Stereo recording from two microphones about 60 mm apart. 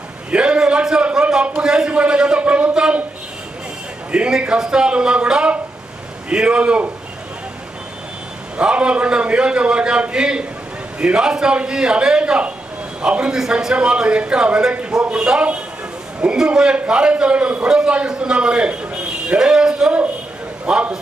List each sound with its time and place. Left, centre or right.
0.3 s a man's voice: centre
4.1 s a man's voice: centre
8.5 s a man's voice: centre